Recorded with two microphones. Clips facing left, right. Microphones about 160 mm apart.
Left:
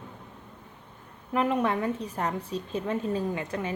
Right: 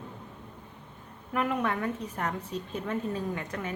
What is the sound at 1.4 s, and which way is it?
A woman's voice, 25° left (ahead or behind).